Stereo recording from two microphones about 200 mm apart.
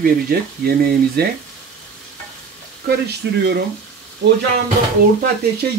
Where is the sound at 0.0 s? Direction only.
50° right (ahead or behind).